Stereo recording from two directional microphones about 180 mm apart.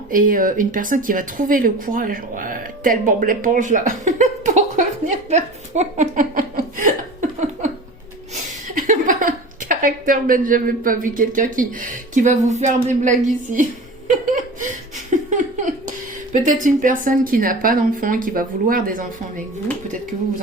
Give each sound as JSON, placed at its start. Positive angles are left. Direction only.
{"t": 0.1, "sound": "speech", "side_deg": -50}
{"t": 5.0, "sound": "a sound", "side_deg": -40}
{"t": 8.7, "sound": "a woman's voice", "side_deg": -45}
{"t": 15.3, "sound": "speech", "side_deg": -45}